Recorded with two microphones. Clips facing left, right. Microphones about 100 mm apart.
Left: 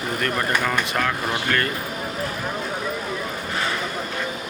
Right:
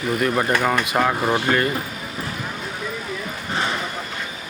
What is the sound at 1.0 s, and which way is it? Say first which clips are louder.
Speech: right 4 dB; 25° right (ahead or behind).